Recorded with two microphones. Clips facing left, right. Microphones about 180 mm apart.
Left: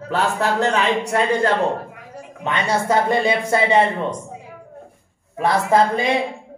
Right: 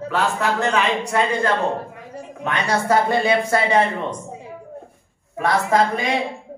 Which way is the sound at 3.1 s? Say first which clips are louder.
Even; 20° left (ahead or behind).